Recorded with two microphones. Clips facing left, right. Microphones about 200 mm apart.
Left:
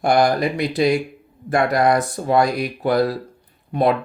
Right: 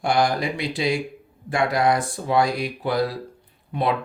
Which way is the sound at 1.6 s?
55° left (ahead or behind).